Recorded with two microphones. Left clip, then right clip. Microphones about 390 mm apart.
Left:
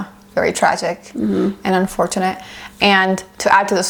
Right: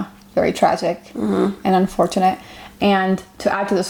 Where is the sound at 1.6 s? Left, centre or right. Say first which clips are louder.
Right 1 dB; left.